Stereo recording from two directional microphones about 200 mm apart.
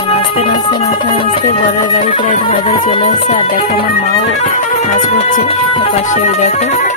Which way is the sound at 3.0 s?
35° left (ahead or behind).